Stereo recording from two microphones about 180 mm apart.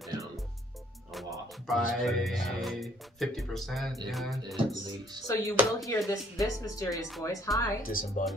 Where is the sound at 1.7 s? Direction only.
Centre (ahead or behind).